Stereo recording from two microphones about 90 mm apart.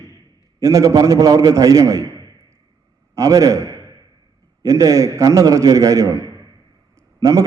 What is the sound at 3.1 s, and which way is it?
A man's voice, 40° right (ahead or behind).